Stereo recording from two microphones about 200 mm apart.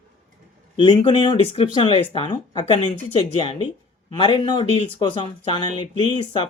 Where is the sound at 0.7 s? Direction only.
25° left (ahead or behind).